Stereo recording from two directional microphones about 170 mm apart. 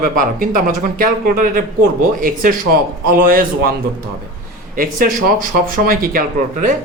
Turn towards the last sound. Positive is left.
turn(degrees=-50)  # may be behind; listen again after turning